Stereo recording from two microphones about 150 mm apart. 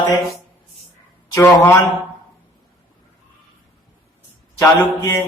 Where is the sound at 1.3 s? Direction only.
20° left (ahead or behind).